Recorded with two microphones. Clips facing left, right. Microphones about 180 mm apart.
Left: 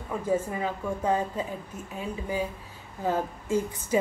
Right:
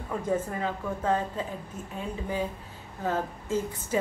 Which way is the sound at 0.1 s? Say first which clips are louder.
Left 1 dB; 10° left (ahead or behind).